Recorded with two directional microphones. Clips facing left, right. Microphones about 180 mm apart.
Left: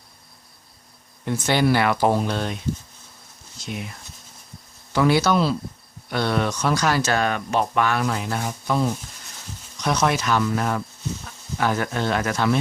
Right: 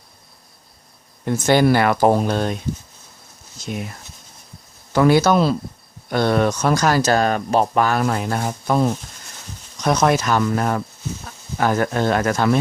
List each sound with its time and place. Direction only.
1.2 s speech: 45° right (ahead or behind)
3.7 s speech: 45° right (ahead or behind)